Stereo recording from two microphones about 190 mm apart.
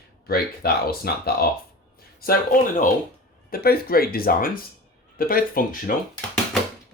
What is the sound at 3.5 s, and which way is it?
Speech, 50° left (ahead or behind).